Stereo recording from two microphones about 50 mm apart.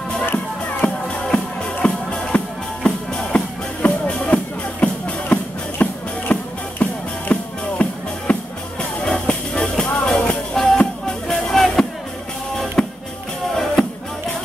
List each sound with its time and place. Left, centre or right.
0.2 s music: left
0.8 s music: centre
1.8 s music: left
5.8 s music: left
6.3 s music: left
9.5 s music: centre